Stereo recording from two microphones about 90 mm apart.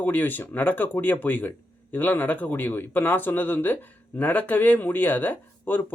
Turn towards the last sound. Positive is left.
turn(degrees=20)  # may be behind; listen again after turning